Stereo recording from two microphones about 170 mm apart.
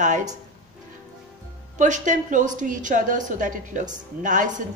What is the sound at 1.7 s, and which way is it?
A woman's voice, 45° right (ahead or behind).